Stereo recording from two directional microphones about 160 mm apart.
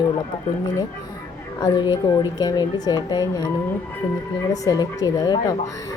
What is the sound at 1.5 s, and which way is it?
A woman's voice, 25° left (ahead or behind).